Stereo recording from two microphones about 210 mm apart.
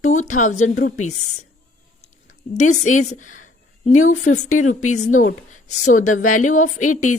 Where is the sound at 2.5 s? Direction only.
35° left (ahead or behind).